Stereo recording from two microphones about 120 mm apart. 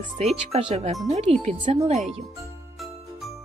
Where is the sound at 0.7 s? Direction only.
60° right (ahead or behind).